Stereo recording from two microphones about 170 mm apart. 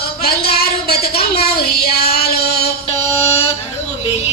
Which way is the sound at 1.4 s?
65° left (ahead or behind).